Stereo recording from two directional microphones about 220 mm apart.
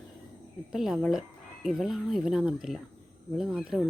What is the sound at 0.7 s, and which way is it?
Speech, centre (ahead or behind).